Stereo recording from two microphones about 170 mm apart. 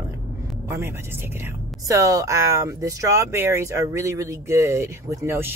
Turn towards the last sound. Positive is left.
turn(degrees=-15)  # may be behind; listen again after turning